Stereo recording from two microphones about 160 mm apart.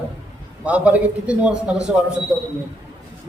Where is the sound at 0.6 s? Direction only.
10° right (ahead or behind).